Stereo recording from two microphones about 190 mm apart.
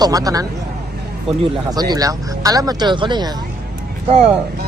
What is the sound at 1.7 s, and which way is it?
Speech, 20° right (ahead or behind).